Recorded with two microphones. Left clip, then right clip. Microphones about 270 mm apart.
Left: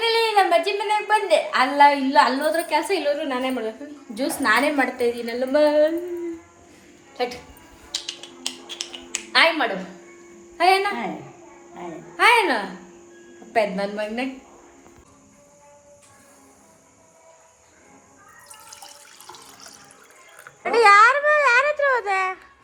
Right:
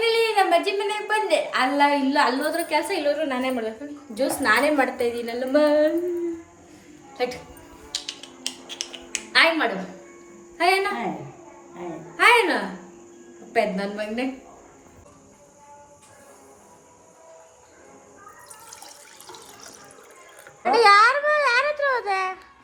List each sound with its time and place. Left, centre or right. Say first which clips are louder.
0.0 s a woman's voice: left 1 dB; centre
7.1 s music: even; centre
10.6 s a woman's voice: left 3 dB; centre
12.1 s a woman's voice: even; centre
18.8 s water: left 1 dB; centre
20.7 s speech: left 2 dB; centre